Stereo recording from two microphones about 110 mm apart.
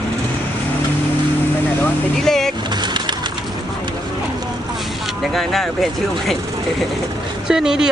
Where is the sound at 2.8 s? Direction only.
45° right (ahead or behind).